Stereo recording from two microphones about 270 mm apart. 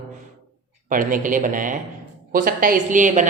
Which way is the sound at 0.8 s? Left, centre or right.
Right.